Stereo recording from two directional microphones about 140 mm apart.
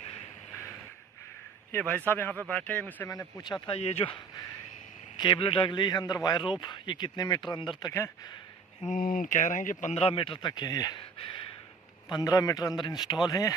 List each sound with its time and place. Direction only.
1.7 s speech: 10° left (ahead or behind)
3.1 s a man's voice: 25° left (ahead or behind)
3.6 s speech: 50° left (ahead or behind)
5.1 s a man's voice: 35° left (ahead or behind)
8.8 s speech: 75° left (ahead or behind)
10.0 s a man's voice: 40° left (ahead or behind)
12.1 s a man's voice: 25° left (ahead or behind)